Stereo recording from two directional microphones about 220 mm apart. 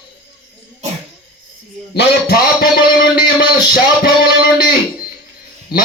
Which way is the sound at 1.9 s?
45° left (ahead or behind).